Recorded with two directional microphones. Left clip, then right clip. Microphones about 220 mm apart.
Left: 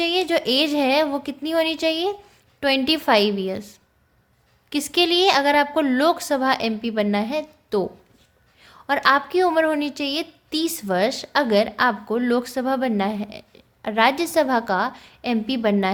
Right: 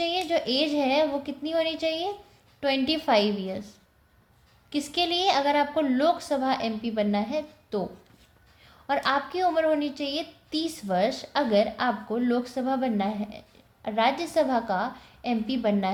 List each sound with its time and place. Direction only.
0.0 s a woman's voice: 30° left (ahead or behind)